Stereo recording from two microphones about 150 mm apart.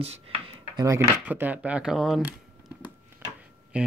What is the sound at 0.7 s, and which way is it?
Speech, 20° right (ahead or behind).